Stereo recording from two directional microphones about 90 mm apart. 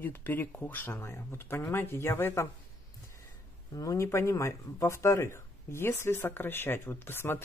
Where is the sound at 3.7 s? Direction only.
40° left (ahead or behind).